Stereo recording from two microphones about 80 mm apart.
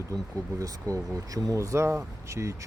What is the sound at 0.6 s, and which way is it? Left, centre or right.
Speech, right.